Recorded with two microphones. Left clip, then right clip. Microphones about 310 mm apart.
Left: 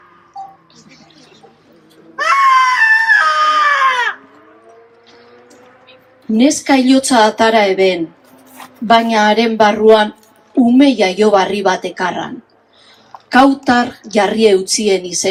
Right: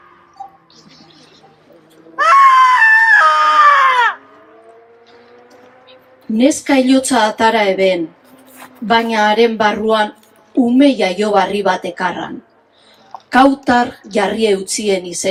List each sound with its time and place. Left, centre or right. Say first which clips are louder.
2.1 s screaming: right 3 dB; centre
5.9 s a woman's voice: left 3 dB; centre
13.3 s a woman's voice: even; centre